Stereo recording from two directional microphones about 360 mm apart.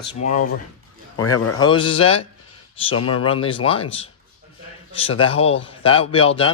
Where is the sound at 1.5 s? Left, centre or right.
Centre.